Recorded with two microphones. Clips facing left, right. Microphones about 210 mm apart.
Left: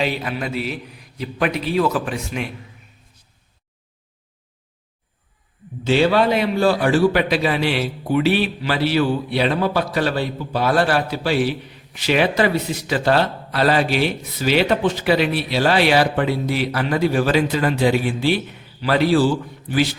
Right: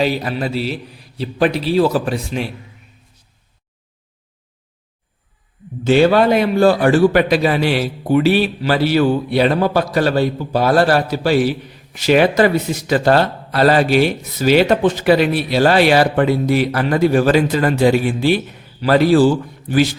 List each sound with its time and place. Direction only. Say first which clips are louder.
0.0 s a man's voice: right 4 dB; 40° right (ahead or behind)
5.8 s a man's voice: right 4 dB; 50° right (ahead or behind)